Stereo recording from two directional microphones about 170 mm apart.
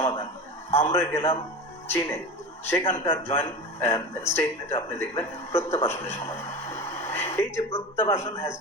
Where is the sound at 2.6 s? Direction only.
15° left (ahead or behind).